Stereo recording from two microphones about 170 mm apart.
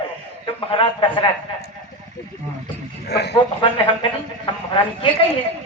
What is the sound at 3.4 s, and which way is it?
Speech, 30° left (ahead or behind).